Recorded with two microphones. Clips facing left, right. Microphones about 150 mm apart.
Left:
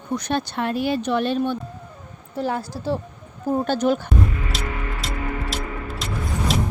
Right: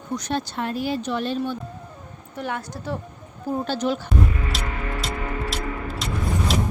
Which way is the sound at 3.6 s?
50° left (ahead or behind).